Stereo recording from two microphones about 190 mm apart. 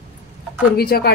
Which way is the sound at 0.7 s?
55° left (ahead or behind).